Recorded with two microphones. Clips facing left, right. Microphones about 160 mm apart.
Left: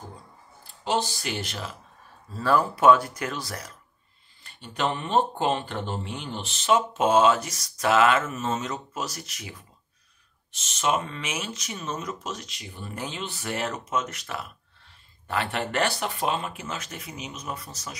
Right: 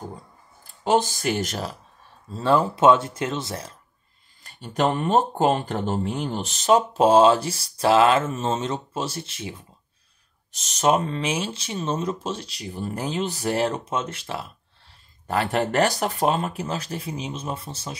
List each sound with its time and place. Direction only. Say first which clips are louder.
0.8 s speech: right 6 dB; 50° right (ahead or behind)
2.3 s speech: right 3 dB; 25° right (ahead or behind)
4.4 s speech: right 5 dB; 40° right (ahead or behind); by 9.7 s 25° right (ahead or behind)
10.5 s speech: right 5 dB; 40° right (ahead or behind)